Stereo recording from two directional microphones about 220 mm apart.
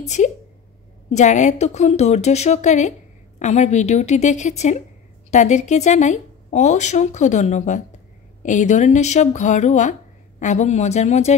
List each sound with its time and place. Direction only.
0.0 s a woman's voice: 30° left (ahead or behind)